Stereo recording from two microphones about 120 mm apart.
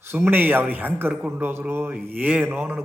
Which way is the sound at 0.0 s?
20° right (ahead or behind).